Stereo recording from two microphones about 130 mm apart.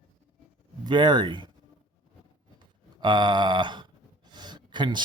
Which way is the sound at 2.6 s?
35° right (ahead or behind).